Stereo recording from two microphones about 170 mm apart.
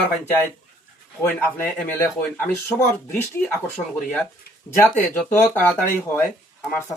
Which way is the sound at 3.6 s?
5° left (ahead or behind).